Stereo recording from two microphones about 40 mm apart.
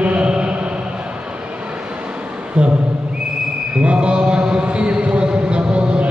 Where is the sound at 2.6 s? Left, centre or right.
Right.